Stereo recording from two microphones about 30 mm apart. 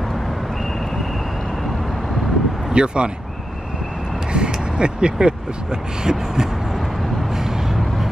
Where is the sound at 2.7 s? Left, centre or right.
Right.